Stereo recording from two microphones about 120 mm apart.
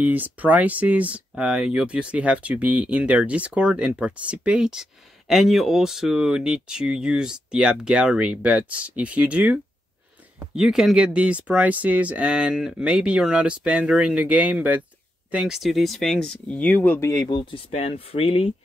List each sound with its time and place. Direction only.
0.0 s speech: 15° right (ahead or behind); by 17.4 s 25° left (ahead or behind)
17.4 s speech: 60° left (ahead or behind)